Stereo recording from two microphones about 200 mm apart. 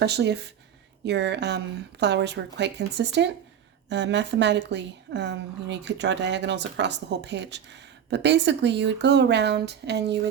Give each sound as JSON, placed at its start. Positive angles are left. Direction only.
{"t": 0.0, "sound": "a woman's voice", "side_deg": -55}